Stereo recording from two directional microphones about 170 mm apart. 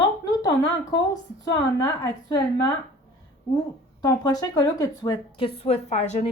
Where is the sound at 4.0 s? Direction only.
25° left (ahead or behind).